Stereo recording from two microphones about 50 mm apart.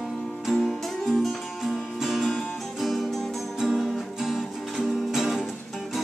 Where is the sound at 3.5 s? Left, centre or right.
Centre.